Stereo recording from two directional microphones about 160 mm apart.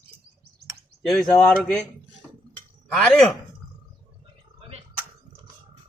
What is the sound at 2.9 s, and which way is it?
Speech, 5° left (ahead or behind).